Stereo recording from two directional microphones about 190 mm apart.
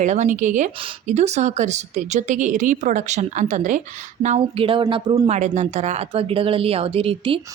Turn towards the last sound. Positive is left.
turn(degrees=-30)  # may be behind; listen again after turning